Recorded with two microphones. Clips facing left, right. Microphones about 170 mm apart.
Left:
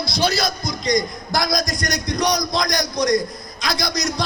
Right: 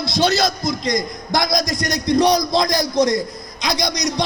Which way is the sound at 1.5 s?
25° right (ahead or behind).